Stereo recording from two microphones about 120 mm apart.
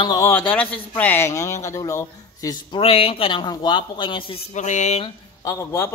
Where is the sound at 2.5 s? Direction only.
45° left (ahead or behind).